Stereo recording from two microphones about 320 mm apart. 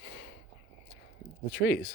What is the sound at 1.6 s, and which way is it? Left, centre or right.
Speech, left.